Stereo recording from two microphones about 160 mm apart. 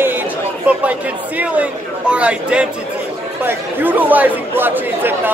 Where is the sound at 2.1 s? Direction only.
5° right (ahead or behind).